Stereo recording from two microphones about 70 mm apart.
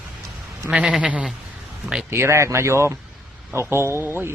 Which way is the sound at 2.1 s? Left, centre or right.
Right.